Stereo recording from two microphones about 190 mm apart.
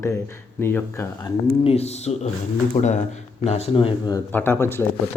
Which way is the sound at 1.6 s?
30° left (ahead or behind).